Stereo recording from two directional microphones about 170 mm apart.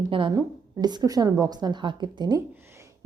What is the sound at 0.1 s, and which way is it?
A woman's voice, 30° right (ahead or behind).